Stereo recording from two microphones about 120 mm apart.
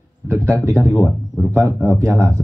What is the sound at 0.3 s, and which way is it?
Speech, 25° right (ahead or behind).